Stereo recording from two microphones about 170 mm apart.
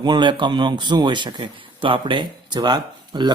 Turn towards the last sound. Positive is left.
turn(degrees=-25)  # may be behind; listen again after turning